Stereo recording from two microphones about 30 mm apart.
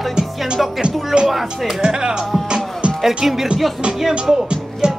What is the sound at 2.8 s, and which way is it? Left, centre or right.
Music, right.